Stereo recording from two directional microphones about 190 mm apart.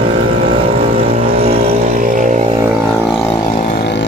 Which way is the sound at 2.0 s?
45° right (ahead or behind).